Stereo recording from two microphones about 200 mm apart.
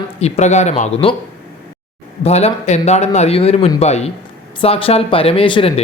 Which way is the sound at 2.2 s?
30° left (ahead or behind).